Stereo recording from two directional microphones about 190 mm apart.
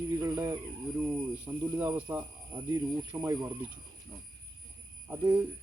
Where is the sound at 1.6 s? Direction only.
10° right (ahead or behind).